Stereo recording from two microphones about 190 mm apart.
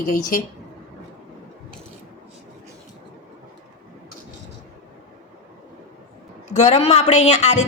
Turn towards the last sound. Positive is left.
turn(degrees=35)  # may be behind; listen again after turning